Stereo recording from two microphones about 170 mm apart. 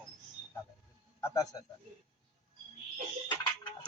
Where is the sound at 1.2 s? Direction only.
20° left (ahead or behind).